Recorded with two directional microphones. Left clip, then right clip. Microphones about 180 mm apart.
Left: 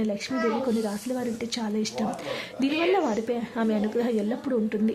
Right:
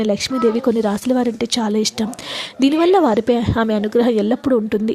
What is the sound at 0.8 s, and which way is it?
Speech, 40° right (ahead or behind).